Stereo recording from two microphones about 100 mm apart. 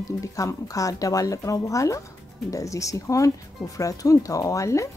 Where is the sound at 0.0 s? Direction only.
35° left (ahead or behind).